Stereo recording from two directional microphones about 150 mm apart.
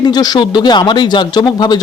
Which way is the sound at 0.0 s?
25° left (ahead or behind).